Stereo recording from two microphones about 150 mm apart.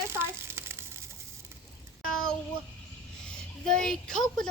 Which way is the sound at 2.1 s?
5° left (ahead or behind).